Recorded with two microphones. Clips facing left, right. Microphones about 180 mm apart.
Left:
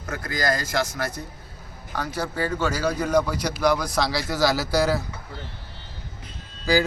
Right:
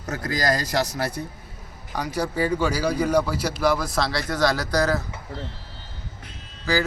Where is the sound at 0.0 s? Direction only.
40° right (ahead or behind).